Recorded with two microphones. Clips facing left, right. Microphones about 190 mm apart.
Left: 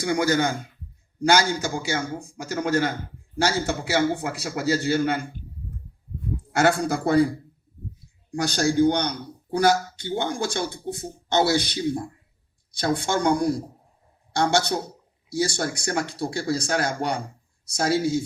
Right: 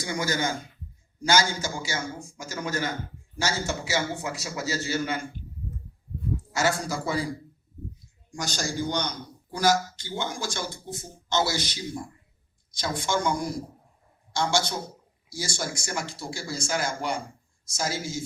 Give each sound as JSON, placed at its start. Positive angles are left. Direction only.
{"t": 0.0, "sound": "a man's voice", "side_deg": 60}
{"t": 6.5, "sound": "a man's voice", "side_deg": 60}